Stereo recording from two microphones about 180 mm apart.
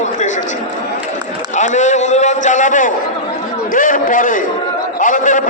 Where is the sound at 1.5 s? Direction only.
40° left (ahead or behind).